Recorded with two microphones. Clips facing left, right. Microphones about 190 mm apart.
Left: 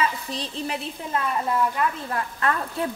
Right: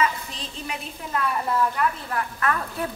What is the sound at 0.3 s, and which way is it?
Speech, 35° left (ahead or behind).